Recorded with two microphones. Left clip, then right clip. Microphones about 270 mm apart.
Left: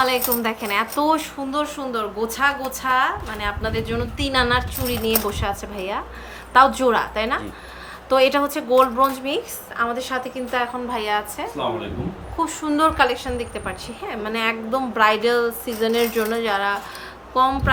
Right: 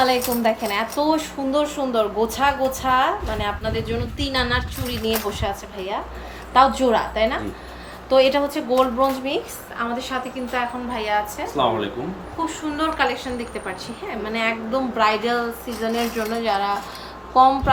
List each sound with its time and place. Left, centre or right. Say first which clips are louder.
0.0 s a woman's voice: right 1 dB; centre
12.5 s a woman's voice: left 5 dB; left